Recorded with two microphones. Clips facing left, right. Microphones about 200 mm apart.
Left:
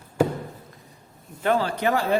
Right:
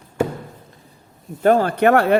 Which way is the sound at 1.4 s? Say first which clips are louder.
Right 7 dB; 45° right (ahead or behind).